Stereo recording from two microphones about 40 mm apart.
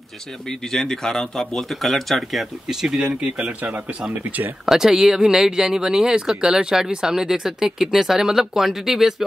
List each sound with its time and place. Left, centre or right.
0.5 s speech: centre
1.7 s speech: centre
2.7 s speech: centre
3.2 s speech: right
4.6 s speech: centre